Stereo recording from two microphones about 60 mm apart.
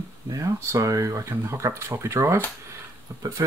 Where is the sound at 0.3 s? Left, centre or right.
Right.